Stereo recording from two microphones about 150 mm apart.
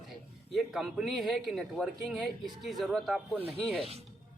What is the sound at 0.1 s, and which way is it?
A man's voice, centre (ahead or behind).